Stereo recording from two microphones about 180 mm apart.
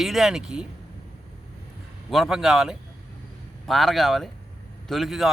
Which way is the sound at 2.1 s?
Centre (ahead or behind).